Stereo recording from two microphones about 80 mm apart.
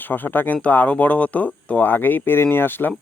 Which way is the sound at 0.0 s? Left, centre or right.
Left.